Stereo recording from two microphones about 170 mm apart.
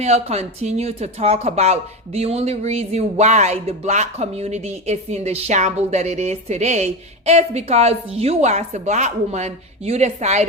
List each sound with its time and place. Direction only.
0.0 s speech: 40° right (ahead or behind)